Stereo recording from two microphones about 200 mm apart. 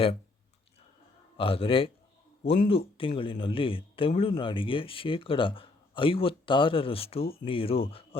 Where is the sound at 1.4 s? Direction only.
25° left (ahead or behind).